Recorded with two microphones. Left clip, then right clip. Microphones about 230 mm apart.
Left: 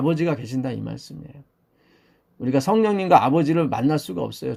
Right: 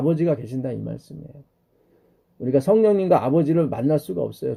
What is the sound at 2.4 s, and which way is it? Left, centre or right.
Speech, left.